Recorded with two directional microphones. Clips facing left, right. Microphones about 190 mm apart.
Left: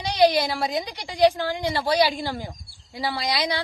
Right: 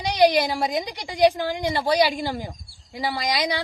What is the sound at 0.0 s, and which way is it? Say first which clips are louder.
Speech: right 1 dB; 15° right (ahead or behind).